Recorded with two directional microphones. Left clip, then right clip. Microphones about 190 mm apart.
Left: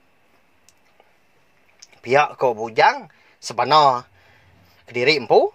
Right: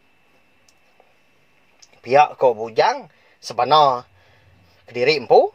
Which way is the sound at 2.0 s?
25° left (ahead or behind).